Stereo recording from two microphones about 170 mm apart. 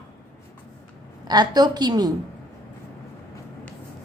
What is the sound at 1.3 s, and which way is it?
Speech, 25° right (ahead or behind).